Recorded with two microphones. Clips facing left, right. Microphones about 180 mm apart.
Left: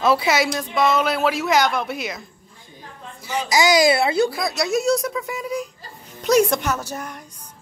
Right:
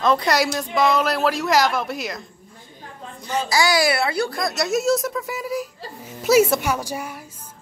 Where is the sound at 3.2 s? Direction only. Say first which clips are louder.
Left 1 dB; 15° left (ahead or behind).